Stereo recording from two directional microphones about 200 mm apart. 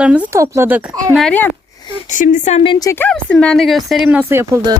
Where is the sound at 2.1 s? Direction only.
40° left (ahead or behind); by 2.9 s 25° left (ahead or behind).